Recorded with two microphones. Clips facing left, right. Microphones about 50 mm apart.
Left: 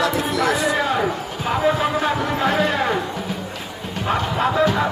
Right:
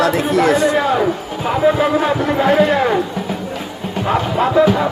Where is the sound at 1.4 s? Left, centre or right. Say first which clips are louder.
Right 5 dB; centre.